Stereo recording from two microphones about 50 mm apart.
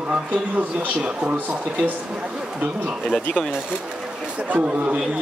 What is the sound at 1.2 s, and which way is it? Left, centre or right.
Speech, right.